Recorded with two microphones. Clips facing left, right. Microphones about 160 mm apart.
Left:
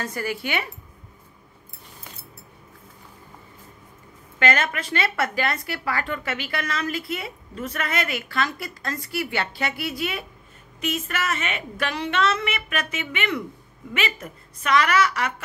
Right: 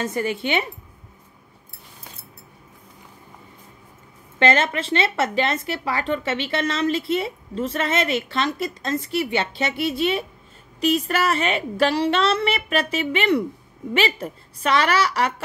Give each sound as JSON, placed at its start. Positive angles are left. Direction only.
{"t": 0.0, "sound": "a woman's voice", "side_deg": -20}
{"t": 4.4, "sound": "a woman's voice", "side_deg": -25}